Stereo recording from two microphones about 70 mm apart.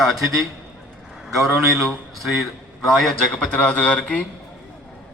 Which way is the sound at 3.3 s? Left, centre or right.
Centre.